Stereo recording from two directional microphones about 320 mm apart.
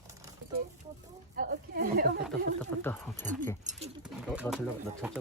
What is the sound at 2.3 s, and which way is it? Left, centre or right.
Speech, centre.